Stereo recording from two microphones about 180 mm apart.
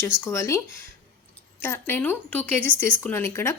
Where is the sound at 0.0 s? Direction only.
15° left (ahead or behind).